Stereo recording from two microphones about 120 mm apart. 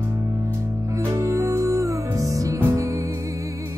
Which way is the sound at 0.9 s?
25° right (ahead or behind).